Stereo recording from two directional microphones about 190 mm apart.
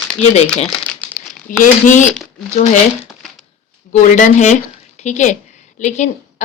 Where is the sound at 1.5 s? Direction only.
40° left (ahead or behind).